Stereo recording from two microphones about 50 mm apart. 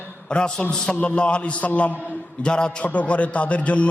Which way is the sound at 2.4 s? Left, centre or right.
Centre.